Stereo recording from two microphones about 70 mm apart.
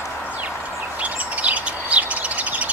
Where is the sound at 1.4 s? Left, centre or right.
Centre.